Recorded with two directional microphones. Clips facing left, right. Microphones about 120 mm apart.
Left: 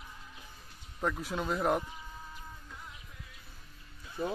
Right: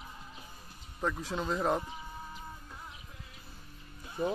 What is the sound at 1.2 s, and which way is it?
Speech, 10° left (ahead or behind).